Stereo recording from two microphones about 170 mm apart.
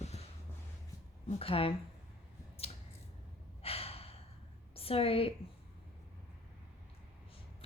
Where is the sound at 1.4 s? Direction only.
35° left (ahead or behind).